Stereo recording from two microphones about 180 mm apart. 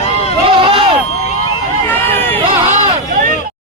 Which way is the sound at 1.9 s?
10° left (ahead or behind).